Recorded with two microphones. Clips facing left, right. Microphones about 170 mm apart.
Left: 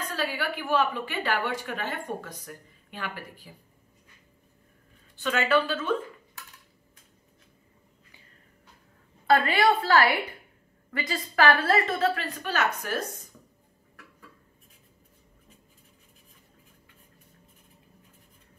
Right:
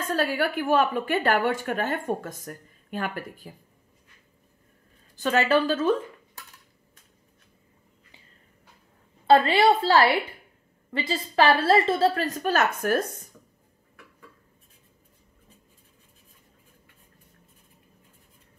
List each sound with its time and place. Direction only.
0.0 s a woman's voice: 45° right (ahead or behind)
5.1 s a woman's voice: 40° right (ahead or behind)
9.3 s a woman's voice: 25° right (ahead or behind); by 13.0 s 50° right (ahead or behind)